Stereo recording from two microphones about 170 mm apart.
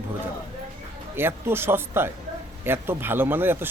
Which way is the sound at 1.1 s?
15° right (ahead or behind).